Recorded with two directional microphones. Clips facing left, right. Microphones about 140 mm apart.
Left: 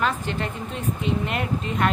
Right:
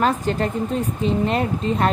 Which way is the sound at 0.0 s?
40° right (ahead or behind).